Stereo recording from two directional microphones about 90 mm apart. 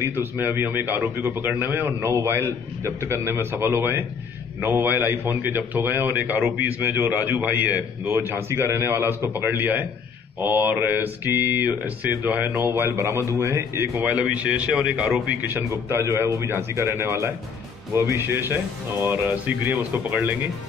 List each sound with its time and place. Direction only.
0.0 s a man's voice: 25° right (ahead or behind)
14.0 s a man's voice: 15° right (ahead or behind)
15.7 s a man's voice: 30° right (ahead or behind)